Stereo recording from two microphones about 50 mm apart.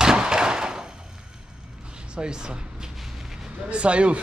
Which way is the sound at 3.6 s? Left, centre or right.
Right.